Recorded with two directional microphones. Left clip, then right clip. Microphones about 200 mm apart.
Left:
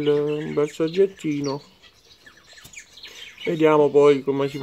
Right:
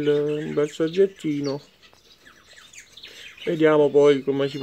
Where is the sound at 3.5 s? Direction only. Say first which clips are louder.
Left 1 dB; 25° right (ahead or behind).